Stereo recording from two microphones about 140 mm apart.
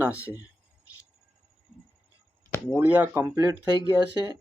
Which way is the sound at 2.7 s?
10° right (ahead or behind).